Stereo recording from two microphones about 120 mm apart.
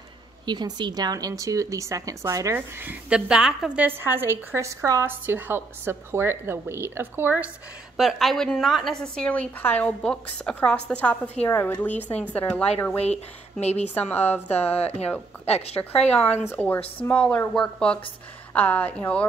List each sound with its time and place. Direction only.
0.5 s speech: 40° right (ahead or behind)
5.2 s speech: 15° right (ahead or behind)
8.0 s a woman's voice: centre (ahead or behind)
13.0 s speech: 65° left (ahead or behind)
13.9 s a woman's voice: 15° left (ahead or behind)
14.5 s speech: 60° left (ahead or behind)
16.5 s a woman's voice: 15° left (ahead or behind)